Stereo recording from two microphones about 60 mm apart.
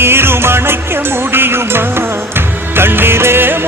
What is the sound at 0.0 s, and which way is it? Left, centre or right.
Music, right.